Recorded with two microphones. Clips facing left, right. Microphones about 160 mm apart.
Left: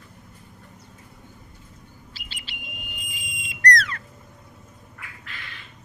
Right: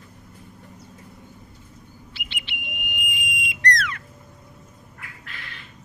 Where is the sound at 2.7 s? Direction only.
35° left (ahead or behind).